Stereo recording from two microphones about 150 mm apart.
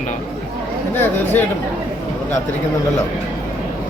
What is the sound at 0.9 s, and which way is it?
Speech, 15° left (ahead or behind).